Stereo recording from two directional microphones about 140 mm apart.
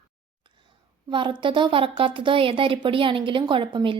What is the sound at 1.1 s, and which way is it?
A woman's voice, 35° right (ahead or behind).